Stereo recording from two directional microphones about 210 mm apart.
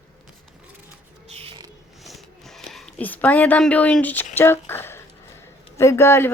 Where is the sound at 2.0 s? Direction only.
Centre (ahead or behind).